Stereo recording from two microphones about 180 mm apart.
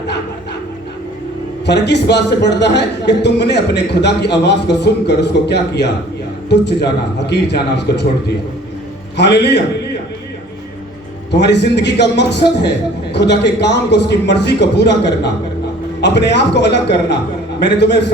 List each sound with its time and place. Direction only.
1.6 s a man's voice: 70° left (ahead or behind)
9.1 s a man's voice: 70° left (ahead or behind)
11.3 s a man's voice: 70° left (ahead or behind)